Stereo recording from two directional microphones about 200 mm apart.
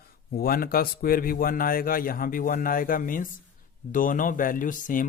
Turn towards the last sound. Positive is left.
turn(degrees=40)  # may be behind; listen again after turning